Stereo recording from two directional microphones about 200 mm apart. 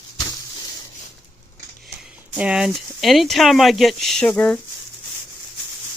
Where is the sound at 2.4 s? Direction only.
5° right (ahead or behind).